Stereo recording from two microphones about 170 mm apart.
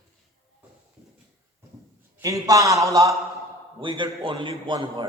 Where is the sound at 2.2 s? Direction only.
20° right (ahead or behind).